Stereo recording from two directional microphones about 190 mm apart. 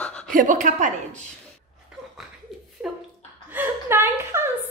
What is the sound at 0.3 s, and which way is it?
Speech, 45° right (ahead or behind).